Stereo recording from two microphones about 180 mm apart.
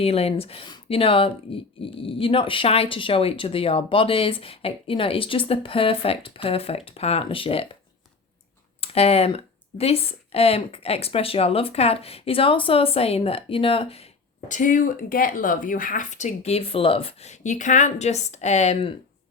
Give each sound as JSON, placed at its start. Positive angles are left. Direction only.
{"t": 0.0, "sound": "speech", "side_deg": 35}
{"t": 8.8, "sound": "speech", "side_deg": 35}